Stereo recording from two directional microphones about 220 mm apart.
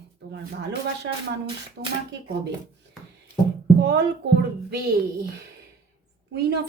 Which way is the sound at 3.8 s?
50° right (ahead or behind).